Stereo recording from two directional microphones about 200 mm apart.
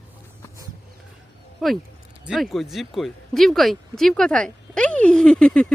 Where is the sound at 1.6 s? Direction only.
Centre (ahead or behind).